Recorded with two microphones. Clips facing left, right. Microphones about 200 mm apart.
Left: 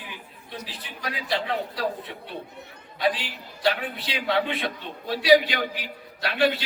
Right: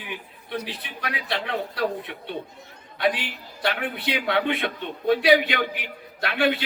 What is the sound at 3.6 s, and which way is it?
A man's voice, 60° right (ahead or behind).